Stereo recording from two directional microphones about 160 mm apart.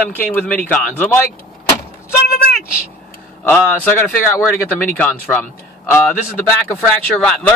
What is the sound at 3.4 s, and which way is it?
Speech, 15° left (ahead or behind).